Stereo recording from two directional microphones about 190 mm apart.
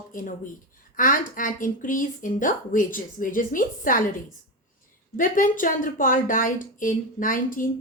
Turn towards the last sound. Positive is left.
turn(degrees=45)  # may be behind; listen again after turning